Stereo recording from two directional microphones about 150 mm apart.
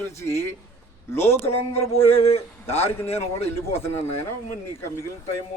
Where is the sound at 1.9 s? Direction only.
40° left (ahead or behind).